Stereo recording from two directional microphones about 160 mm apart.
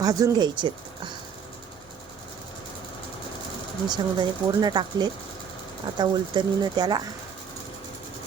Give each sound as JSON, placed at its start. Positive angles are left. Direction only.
{"t": 0.0, "sound": "speech", "side_deg": -20}
{"t": 3.8, "sound": "speech", "side_deg": -25}